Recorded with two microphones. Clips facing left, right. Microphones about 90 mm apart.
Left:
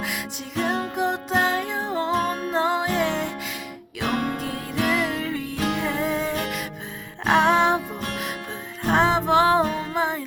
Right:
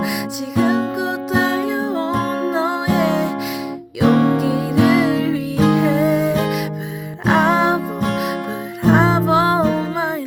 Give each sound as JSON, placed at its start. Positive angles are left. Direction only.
{"t": 0.5, "sound": "music", "side_deg": -5}
{"t": 4.0, "sound": "music", "side_deg": -50}
{"t": 4.4, "sound": "music", "side_deg": -10}
{"t": 8.8, "sound": "music", "side_deg": -5}